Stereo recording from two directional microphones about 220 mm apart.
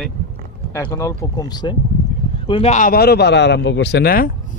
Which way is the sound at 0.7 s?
15° left (ahead or behind).